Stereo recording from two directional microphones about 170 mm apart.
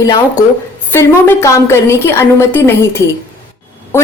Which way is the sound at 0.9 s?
15° left (ahead or behind).